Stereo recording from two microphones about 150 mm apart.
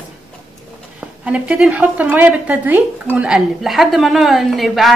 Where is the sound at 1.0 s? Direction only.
5° right (ahead or behind).